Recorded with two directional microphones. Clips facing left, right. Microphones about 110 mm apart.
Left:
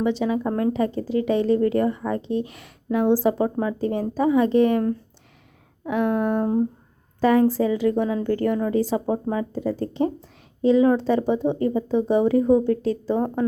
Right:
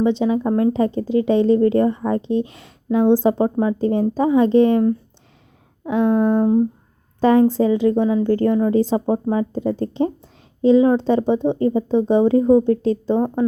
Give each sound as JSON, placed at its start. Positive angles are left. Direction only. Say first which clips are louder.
{"t": 0.0, "sound": "speech", "louder": "right 4 dB", "side_deg": -25}